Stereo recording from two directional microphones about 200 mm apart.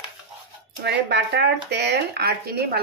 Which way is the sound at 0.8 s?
55° right (ahead or behind).